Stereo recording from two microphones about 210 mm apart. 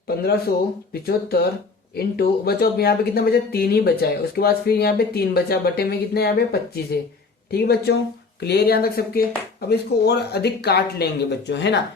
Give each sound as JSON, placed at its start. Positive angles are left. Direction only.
{"t": 0.2, "sound": "speech", "side_deg": 50}